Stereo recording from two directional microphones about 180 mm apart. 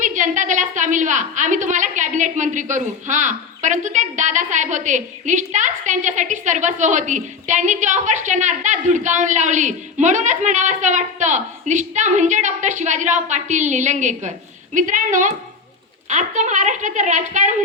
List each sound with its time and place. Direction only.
0.0 s a woman's voice: 45° right (ahead or behind)